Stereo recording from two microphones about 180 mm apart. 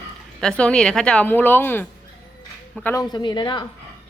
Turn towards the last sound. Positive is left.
turn(degrees=25)  # may be behind; listen again after turning